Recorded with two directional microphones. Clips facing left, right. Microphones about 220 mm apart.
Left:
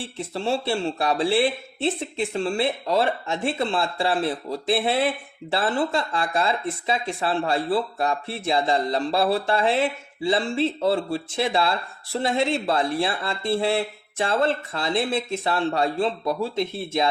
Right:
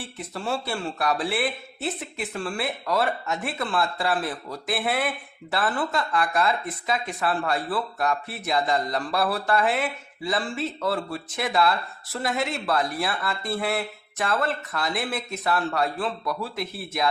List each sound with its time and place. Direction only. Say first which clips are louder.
0.0 s speech: left 5 dB; 25° left (ahead or behind)